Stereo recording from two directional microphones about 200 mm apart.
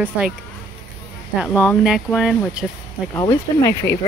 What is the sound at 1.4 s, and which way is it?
Speech, centre (ahead or behind).